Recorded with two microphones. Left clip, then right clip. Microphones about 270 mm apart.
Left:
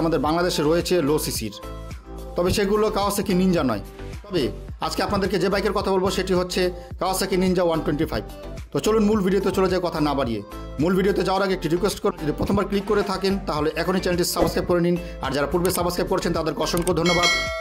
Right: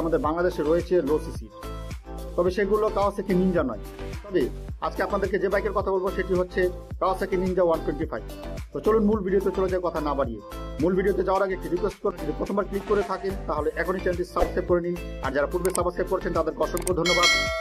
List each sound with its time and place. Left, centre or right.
0.1 s speech: left
2.3 s speech: left
17.0 s speech: centre